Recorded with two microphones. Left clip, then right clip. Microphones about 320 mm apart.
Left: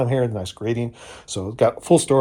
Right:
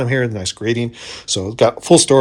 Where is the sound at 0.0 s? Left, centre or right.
Centre.